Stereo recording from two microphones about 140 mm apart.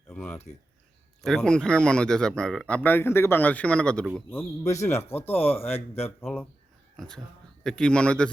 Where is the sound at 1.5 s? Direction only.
5° left (ahead or behind).